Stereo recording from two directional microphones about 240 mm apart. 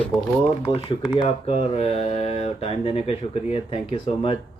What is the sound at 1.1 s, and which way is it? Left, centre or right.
Speech, left.